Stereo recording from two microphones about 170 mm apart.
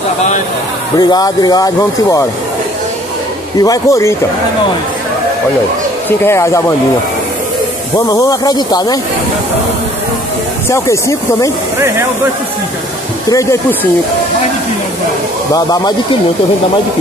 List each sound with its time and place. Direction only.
0.9 s speech: 25° left (ahead or behind)
3.6 s speech: 20° left (ahead or behind)
6.0 s speech: 15° left (ahead or behind)
8.1 s speech: 20° left (ahead or behind)
10.7 s speech: 15° left (ahead or behind)
13.3 s speech: 20° left (ahead or behind)
15.5 s speech: 20° left (ahead or behind)